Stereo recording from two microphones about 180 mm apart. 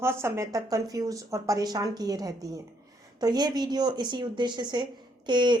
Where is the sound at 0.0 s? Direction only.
15° right (ahead or behind).